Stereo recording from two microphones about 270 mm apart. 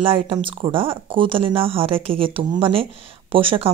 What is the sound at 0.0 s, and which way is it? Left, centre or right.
Speech, centre.